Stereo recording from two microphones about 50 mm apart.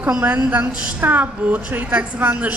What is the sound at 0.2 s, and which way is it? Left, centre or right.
Speech, right.